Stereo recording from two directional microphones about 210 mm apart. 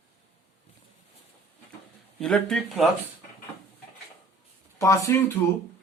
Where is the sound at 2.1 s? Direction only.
Centre (ahead or behind).